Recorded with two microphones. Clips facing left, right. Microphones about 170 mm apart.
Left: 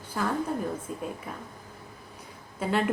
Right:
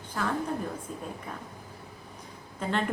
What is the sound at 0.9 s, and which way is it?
Speech, 5° left (ahead or behind).